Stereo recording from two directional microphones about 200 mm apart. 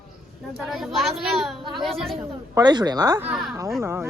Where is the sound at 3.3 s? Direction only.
Centre (ahead or behind).